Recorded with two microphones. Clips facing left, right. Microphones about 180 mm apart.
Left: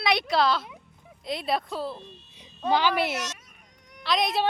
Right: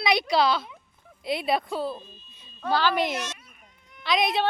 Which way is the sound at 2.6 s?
15° left (ahead or behind).